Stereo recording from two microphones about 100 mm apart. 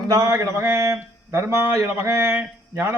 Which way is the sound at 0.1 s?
35° right (ahead or behind).